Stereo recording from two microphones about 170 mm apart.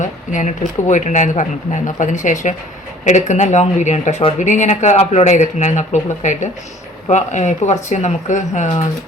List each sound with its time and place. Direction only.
0.0 s speech: 45° left (ahead or behind)